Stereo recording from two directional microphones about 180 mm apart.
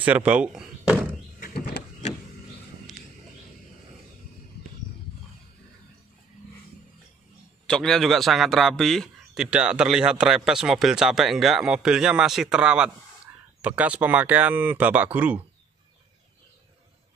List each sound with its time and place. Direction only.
0.0 s speech: 10° right (ahead or behind)
1.4 s a sound: 55° left (ahead or behind)
7.6 s a man's voice: 5° left (ahead or behind)